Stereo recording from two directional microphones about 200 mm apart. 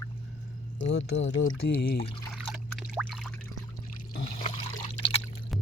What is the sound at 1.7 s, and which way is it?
Speech, 50° left (ahead or behind).